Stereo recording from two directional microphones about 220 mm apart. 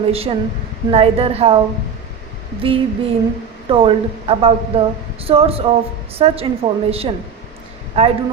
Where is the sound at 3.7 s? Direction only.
25° right (ahead or behind).